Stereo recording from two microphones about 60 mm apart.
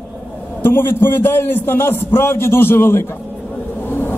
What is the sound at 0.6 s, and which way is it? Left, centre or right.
A man's voice, left.